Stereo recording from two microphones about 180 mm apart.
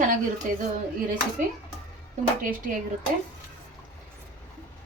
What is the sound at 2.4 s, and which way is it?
Speech, 50° right (ahead or behind).